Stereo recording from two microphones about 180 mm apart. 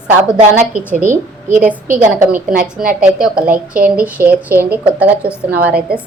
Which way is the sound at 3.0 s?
5° right (ahead or behind).